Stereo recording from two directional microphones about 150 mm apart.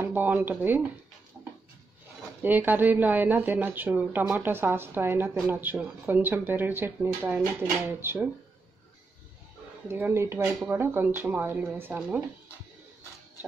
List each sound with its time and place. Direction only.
0.0 s a woman's voice: 10° right (ahead or behind)
2.4 s a woman's voice: 10° right (ahead or behind)
9.8 s a woman's voice: 15° right (ahead or behind)